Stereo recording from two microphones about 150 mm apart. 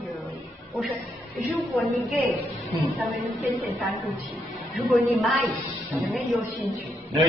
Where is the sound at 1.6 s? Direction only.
Centre (ahead or behind).